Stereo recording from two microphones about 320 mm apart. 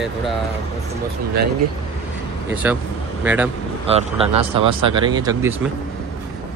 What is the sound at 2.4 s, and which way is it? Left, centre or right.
Speech, centre.